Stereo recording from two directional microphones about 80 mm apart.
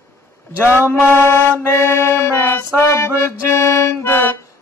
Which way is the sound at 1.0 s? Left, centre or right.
Left.